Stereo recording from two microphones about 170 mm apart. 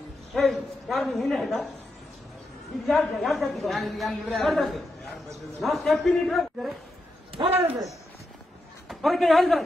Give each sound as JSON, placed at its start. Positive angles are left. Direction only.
{"t": 0.3, "sound": "a woman's voice", "side_deg": 0}
{"t": 2.9, "sound": "a woman's voice", "side_deg": 0}
{"t": 7.4, "sound": "speech", "side_deg": -25}
{"t": 8.8, "sound": "a man's voice", "side_deg": 0}